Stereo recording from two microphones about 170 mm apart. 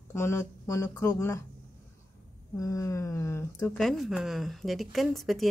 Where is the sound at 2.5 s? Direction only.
20° left (ahead or behind).